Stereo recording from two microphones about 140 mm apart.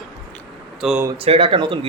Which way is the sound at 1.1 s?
40° right (ahead or behind).